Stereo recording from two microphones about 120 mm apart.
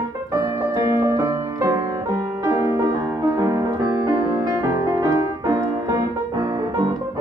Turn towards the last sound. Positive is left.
turn(degrees=-25)  # may be behind; listen again after turning